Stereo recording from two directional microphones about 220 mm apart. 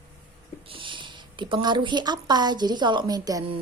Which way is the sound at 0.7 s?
20° right (ahead or behind).